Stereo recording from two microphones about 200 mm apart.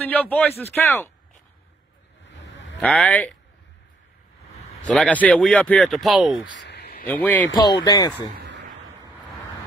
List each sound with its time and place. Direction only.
0.0 s speech: 10° left (ahead or behind)
2.8 s speech: 5° left (ahead or behind)
4.8 s speech: 5° left (ahead or behind)
6.5 s a sound: 60° left (ahead or behind)
7.1 s speech: 10° left (ahead or behind)
7.5 s speech: 20° left (ahead or behind)
8.4 s a sound: 60° right (ahead or behind)